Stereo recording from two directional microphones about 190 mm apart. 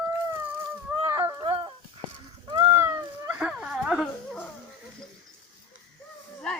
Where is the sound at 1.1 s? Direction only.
15° right (ahead or behind).